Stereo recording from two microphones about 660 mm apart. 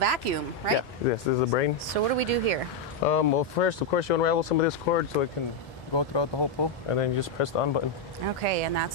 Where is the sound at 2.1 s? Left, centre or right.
Right.